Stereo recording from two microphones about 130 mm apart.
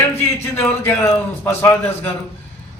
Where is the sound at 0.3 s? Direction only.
15° left (ahead or behind).